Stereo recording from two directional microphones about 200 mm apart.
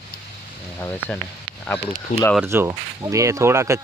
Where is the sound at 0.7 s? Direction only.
10° left (ahead or behind).